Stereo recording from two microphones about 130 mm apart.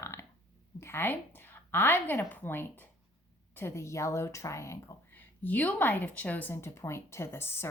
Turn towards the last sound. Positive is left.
turn(degrees=20)  # may be behind; listen again after turning